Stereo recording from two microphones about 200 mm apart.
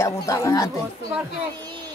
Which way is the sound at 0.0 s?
15° left (ahead or behind).